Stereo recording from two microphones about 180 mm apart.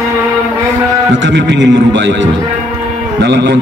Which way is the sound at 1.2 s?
85° right.